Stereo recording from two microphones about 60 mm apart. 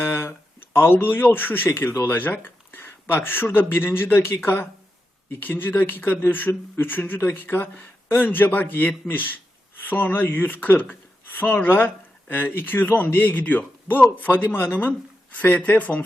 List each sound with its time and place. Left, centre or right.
0.0 s a man's voice: left